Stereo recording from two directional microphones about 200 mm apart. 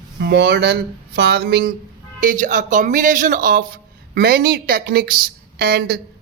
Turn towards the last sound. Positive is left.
turn(degrees=-50)  # may be behind; listen again after turning